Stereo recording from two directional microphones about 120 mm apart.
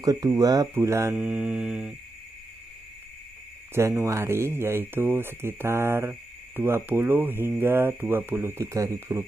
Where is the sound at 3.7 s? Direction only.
25° right (ahead or behind).